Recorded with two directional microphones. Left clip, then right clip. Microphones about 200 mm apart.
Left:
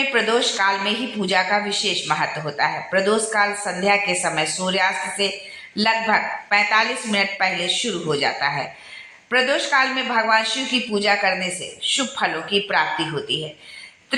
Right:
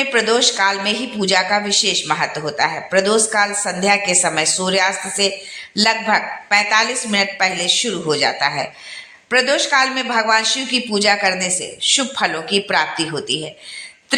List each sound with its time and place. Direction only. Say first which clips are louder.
0.1 s a woman's voice: right 4 dB; 50° right (ahead or behind)